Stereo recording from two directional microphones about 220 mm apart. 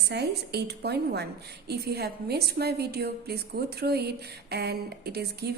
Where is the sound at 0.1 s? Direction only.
50° right (ahead or behind).